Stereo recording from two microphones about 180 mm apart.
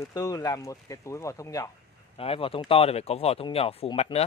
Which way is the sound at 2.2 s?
30° left (ahead or behind).